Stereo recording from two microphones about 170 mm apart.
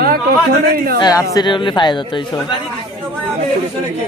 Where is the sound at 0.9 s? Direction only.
20° left (ahead or behind).